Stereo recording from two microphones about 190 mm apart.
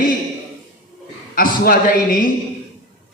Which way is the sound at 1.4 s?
50° left (ahead or behind).